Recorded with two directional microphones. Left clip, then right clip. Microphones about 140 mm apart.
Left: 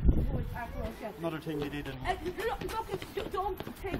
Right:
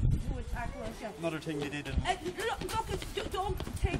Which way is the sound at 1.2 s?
15° right (ahead or behind).